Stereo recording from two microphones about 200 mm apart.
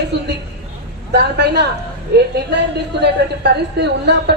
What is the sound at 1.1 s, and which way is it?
Speech, 55° right (ahead or behind).